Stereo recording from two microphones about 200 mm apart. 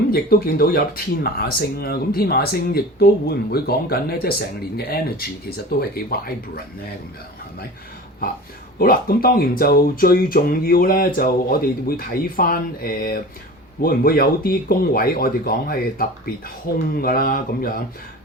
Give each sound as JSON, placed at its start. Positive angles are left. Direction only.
{"t": 0.1, "sound": "speech", "side_deg": 50}
{"t": 8.8, "sound": "speech", "side_deg": 45}